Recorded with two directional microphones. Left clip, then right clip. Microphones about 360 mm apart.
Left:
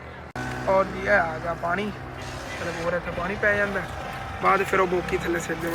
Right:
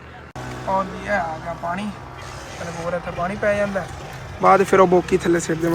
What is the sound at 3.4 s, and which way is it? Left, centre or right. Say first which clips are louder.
Speech: right 2 dB; centre.